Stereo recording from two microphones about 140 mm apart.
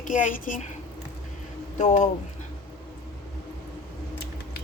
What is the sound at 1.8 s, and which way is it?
Speech, 60° left (ahead or behind).